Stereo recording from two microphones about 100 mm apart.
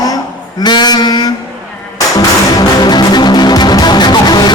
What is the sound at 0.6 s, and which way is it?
Speech, 45° left (ahead or behind).